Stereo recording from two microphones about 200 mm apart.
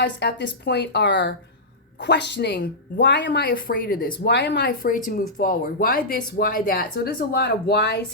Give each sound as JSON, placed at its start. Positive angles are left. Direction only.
{"t": 0.0, "sound": "a woman's voice", "side_deg": 60}
{"t": 4.2, "sound": "speech", "side_deg": 60}